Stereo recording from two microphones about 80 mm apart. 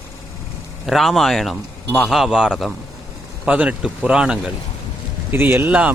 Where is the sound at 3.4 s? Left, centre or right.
Centre.